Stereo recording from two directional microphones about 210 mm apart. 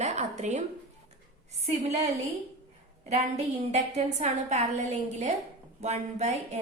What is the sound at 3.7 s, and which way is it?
Speech, 30° right (ahead or behind).